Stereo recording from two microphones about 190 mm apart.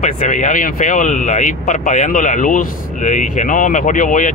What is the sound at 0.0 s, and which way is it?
Speech, 40° left (ahead or behind).